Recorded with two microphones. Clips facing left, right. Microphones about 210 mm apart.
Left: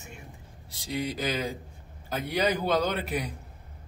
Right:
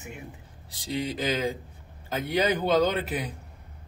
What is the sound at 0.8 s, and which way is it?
A man's voice, centre (ahead or behind).